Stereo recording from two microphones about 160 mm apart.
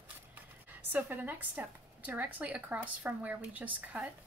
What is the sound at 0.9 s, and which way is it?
A woman's voice, 10° right (ahead or behind).